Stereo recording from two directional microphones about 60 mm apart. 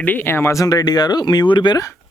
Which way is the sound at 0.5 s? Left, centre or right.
Left.